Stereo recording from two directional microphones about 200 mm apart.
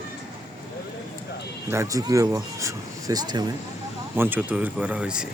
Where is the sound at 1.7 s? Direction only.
15° right (ahead or behind).